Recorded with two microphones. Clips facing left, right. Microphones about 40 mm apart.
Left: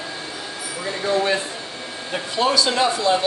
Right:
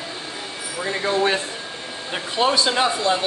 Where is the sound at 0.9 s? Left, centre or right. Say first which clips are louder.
Even; right.